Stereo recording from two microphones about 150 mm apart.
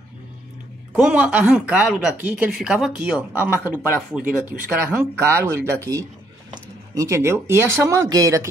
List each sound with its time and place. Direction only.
0.9 s speech: 5° right (ahead or behind)
7.0 s speech: 20° right (ahead or behind)